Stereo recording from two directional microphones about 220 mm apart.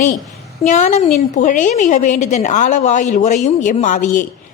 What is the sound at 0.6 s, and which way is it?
A woman's voice, 35° left (ahead or behind).